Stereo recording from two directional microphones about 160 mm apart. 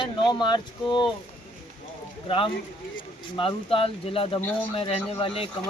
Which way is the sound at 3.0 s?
35° left (ahead or behind).